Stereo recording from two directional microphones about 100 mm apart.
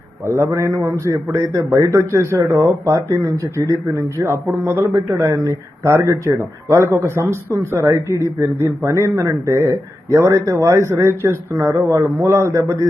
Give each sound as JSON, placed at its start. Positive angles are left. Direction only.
{"t": 0.3, "sound": "a man's voice", "side_deg": -30}